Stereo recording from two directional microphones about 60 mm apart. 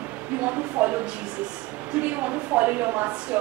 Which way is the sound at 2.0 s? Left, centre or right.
Right.